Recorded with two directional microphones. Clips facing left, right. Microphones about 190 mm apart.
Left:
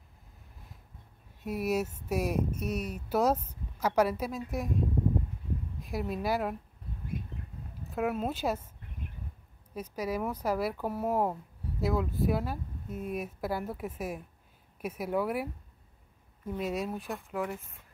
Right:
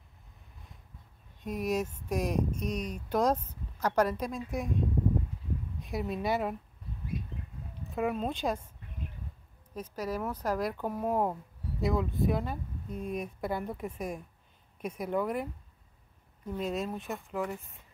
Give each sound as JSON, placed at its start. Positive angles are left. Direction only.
{"t": 1.4, "sound": "speech", "side_deg": 5}
{"t": 7.9, "sound": "speech", "side_deg": 5}
{"t": 9.8, "sound": "speech", "side_deg": 10}